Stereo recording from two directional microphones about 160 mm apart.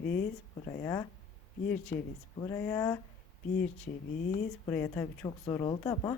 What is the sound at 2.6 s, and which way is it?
Speech, 20° left (ahead or behind).